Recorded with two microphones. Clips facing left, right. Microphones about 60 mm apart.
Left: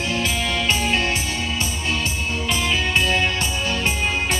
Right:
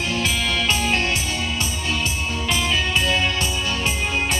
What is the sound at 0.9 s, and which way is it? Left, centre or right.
Music, left.